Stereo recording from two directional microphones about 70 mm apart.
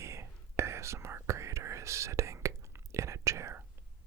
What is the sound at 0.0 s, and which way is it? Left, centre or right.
Whispering, right.